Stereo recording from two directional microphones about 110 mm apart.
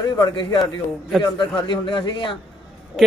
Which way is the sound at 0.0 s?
40° left (ahead or behind).